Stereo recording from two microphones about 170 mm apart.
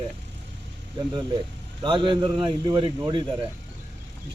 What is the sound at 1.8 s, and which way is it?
Speech, 25° right (ahead or behind).